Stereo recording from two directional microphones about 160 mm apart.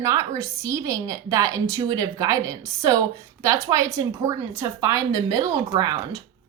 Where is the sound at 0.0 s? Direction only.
20° right (ahead or behind).